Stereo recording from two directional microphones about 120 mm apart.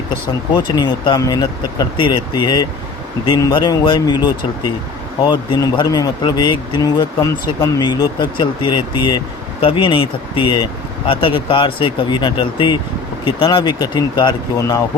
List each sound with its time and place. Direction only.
0.5 s speech: 40° left (ahead or behind)